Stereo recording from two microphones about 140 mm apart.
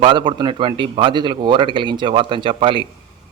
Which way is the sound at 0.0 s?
35° right (ahead or behind).